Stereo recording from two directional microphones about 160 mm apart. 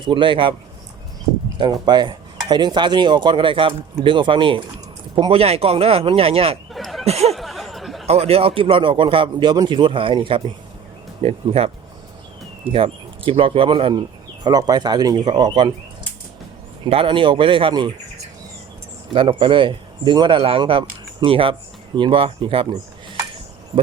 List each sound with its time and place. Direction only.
0.0 s a man's voice: 30° right (ahead or behind)
1.5 s a man's voice: 25° right (ahead or behind)
6.7 s a sound: centre (ahead or behind)
7.0 s speech: 40° right (ahead or behind)
7.3 s a sound: centre (ahead or behind)
8.0 s a man's voice: 40° right (ahead or behind)
12.7 s a man's voice: 35° right (ahead or behind)
16.8 s a man's voice: 35° right (ahead or behind)
19.1 s a man's voice: 35° right (ahead or behind)